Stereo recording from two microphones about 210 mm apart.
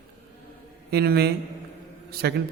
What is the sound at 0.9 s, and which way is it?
Speech, 50° right (ahead or behind).